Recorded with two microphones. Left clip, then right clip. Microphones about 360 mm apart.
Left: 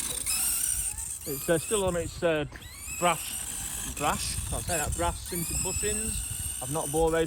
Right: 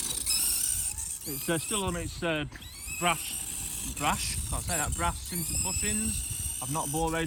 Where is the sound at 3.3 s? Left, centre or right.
Centre.